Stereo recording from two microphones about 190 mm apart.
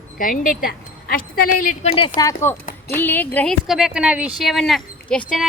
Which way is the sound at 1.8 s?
30° left (ahead or behind).